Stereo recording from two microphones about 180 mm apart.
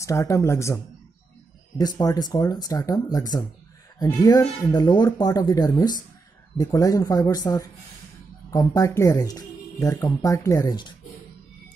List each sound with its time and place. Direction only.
0.0 s speech: 15° left (ahead or behind)
1.8 s speech: 20° left (ahead or behind)